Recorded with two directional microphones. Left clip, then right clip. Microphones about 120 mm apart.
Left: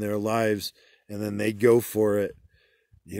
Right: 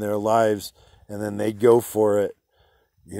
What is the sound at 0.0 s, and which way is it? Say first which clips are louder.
Speech: right 6 dB; 15° left (ahead or behind).